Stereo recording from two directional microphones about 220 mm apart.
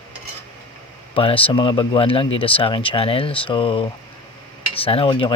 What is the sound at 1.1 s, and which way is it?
Speech, 25° left (ahead or behind).